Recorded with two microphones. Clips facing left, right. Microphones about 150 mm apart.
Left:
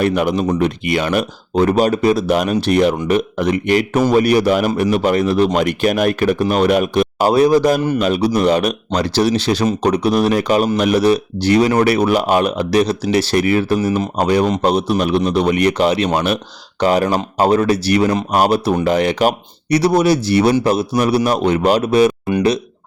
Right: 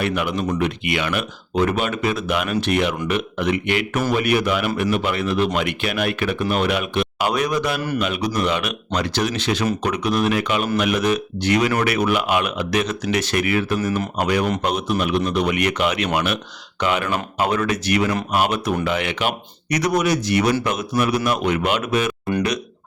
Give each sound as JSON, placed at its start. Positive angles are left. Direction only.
{"t": 0.0, "sound": "speech", "side_deg": 40}